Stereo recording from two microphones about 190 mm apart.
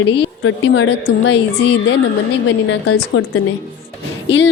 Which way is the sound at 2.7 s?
75° left (ahead or behind).